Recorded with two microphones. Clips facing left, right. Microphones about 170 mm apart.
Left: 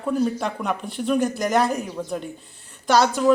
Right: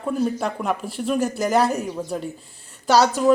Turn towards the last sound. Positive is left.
turn(degrees=-10)  # may be behind; listen again after turning